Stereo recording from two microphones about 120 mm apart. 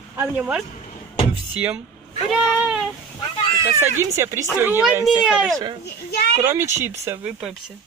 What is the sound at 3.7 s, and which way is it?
Speech, 20° right (ahead or behind).